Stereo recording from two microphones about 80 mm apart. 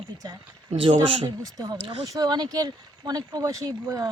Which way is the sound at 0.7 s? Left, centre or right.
Right.